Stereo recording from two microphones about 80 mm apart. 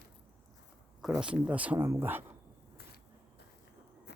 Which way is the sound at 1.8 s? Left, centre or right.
Right.